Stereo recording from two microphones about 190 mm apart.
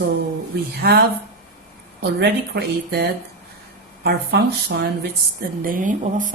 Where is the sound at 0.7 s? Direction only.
55° right (ahead or behind).